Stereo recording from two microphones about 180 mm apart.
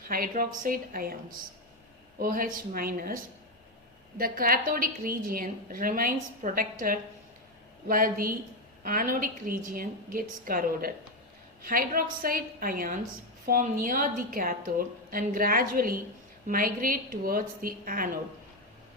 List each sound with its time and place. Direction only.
0.1 s a woman's voice: 50° right (ahead or behind)
4.2 s a woman's voice: 55° right (ahead or behind)